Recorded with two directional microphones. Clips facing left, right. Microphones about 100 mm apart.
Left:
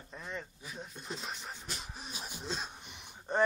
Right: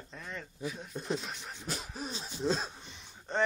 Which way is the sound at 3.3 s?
15° left (ahead or behind).